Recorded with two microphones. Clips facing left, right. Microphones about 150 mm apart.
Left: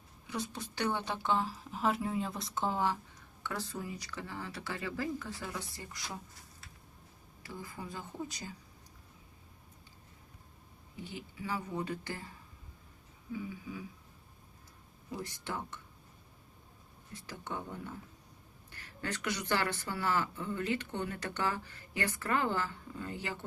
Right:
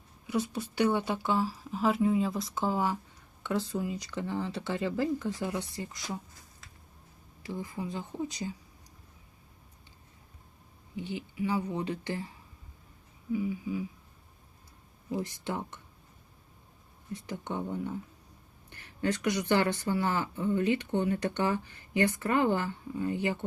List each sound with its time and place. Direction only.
0.3 s a woman's voice: 10° right (ahead or behind)
7.4 s speech: 20° right (ahead or behind)
10.9 s speech: 15° right (ahead or behind)
13.3 s a woman's voice: 15° right (ahead or behind)
15.1 s a woman's voice: 20° right (ahead or behind)
17.2 s a woman's voice: 20° right (ahead or behind)